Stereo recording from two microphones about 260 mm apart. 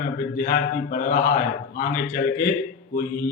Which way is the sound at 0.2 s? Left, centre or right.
Left.